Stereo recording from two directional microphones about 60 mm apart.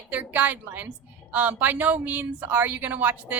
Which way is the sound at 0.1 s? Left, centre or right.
Right.